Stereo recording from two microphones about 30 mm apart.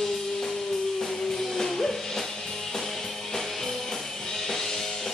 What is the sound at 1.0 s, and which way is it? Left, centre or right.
Music, centre.